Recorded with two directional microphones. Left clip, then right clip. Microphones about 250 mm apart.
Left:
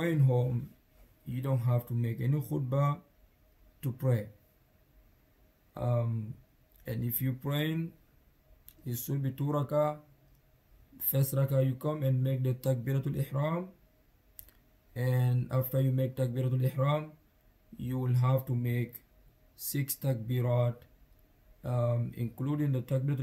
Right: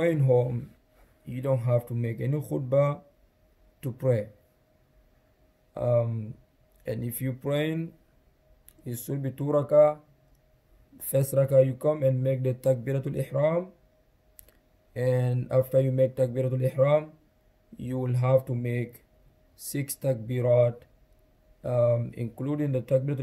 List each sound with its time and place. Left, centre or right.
0.0 s speech: centre
5.8 s speech: centre
8.8 s speech: centre
11.0 s speech: centre
15.0 s speech: centre